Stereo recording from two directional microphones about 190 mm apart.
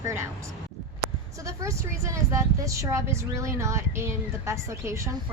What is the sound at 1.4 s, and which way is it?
Speech, 15° right (ahead or behind).